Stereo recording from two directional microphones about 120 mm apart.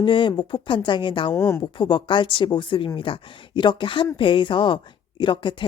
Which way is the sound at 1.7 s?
40° left (ahead or behind).